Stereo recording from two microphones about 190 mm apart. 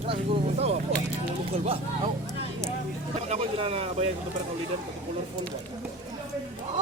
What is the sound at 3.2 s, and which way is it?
Speech, 35° right (ahead or behind).